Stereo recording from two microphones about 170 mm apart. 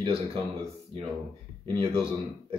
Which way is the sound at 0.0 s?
35° right (ahead or behind).